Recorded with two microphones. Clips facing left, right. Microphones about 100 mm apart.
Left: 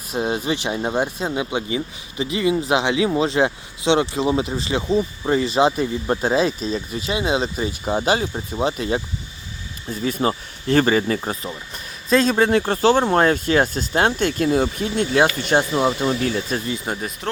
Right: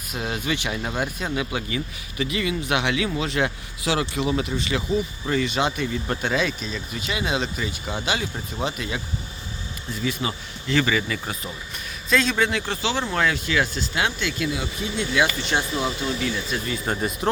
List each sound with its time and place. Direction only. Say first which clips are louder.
0.1 s speech: left 5 dB; 30° left (ahead or behind)
16.8 s speech: right 1 dB; 5° left (ahead or behind)